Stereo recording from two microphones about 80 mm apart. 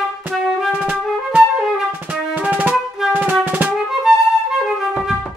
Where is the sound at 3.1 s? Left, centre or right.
Right.